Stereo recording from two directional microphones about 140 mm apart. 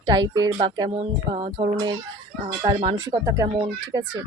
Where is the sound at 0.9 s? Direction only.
45° right (ahead or behind).